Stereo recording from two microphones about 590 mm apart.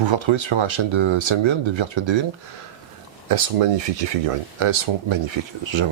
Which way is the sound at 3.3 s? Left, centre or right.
Right.